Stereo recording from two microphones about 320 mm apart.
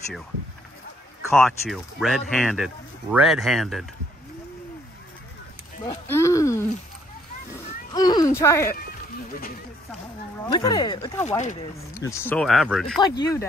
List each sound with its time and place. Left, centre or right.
1.3 s speech: centre
5.9 s speech: centre
7.9 s speech: centre
10.5 s speech: centre
11.2 s speech: left
11.9 s speech: centre